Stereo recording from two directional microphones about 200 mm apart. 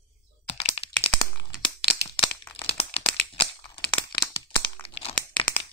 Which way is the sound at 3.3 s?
25° left (ahead or behind).